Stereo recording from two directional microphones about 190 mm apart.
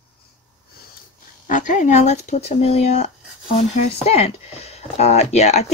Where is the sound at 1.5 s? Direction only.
40° left (ahead or behind).